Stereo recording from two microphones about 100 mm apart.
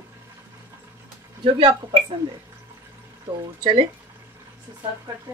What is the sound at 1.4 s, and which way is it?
Speech, 60° right (ahead or behind).